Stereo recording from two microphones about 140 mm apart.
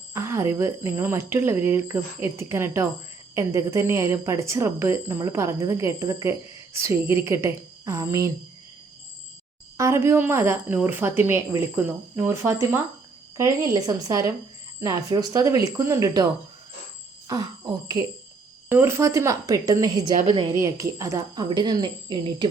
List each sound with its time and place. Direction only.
0.1 s speech: 20° right (ahead or behind)
9.7 s a woman's voice: 20° right (ahead or behind)
17.2 s speech: 25° right (ahead or behind)